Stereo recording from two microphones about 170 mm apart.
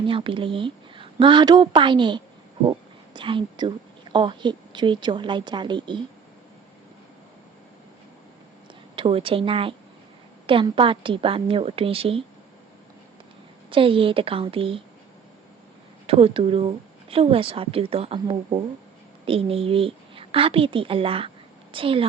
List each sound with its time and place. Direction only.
0.1 s a woman's voice: 30° right (ahead or behind)
9.0 s speech: 30° right (ahead or behind)
13.7 s speech: 30° right (ahead or behind)
16.0 s a woman's voice: 35° right (ahead or behind)